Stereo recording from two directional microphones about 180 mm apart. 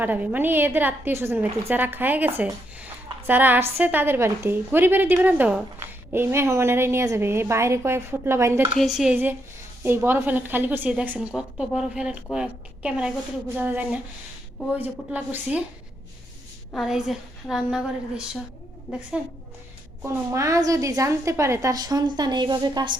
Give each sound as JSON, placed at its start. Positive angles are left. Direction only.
{"t": 0.0, "sound": "a woman's voice", "side_deg": -10}
{"t": 8.8, "sound": "a woman's voice", "side_deg": 0}
{"t": 16.7, "sound": "a woman's voice", "side_deg": 0}
{"t": 18.9, "sound": "a woman's voice", "side_deg": -5}
{"t": 20.3, "sound": "a woman's voice", "side_deg": -15}